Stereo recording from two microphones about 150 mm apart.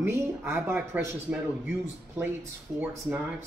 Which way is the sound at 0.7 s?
5° right (ahead or behind).